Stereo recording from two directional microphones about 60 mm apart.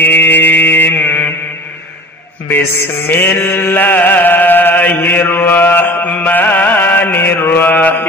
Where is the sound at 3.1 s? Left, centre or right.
Left.